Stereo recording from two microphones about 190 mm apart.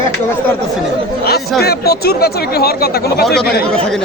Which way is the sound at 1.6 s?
55° left (ahead or behind).